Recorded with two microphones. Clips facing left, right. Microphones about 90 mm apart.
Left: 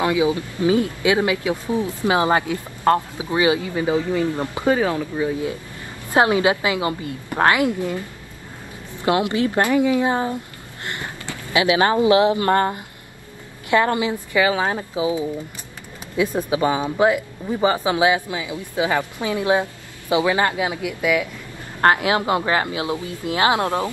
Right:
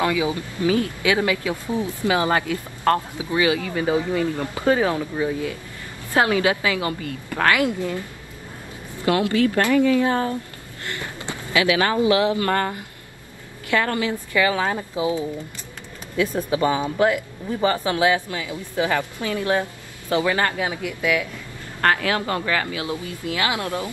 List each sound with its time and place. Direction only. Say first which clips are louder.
0.0 s speech: left 3 dB; 20° left (ahead or behind)
6.1 s speech: left 2 dB; 25° left (ahead or behind)
11.5 s speech: left 2 dB; 25° left (ahead or behind); by 21.3 s 5° left (ahead or behind)
21.8 s speech: left 4 dB; 20° left (ahead or behind)